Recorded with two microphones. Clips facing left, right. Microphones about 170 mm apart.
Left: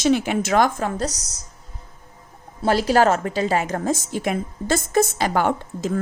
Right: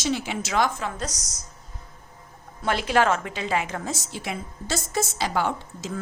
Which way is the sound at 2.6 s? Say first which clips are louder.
Left 5 dB; 35° left (ahead or behind).